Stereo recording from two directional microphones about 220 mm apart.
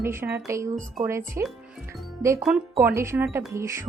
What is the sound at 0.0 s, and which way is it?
A woman's voice, 10° right (ahead or behind).